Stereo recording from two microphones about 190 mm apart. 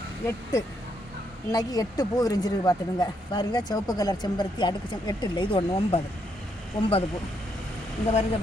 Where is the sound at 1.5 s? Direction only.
20° left (ahead or behind).